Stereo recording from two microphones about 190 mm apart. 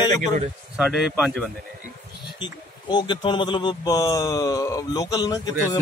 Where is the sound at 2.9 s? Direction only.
25° left (ahead or behind).